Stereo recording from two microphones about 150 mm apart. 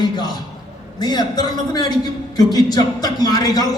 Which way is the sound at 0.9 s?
25° left (ahead or behind).